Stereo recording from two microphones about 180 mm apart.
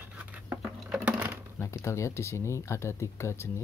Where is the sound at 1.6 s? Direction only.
15° left (ahead or behind).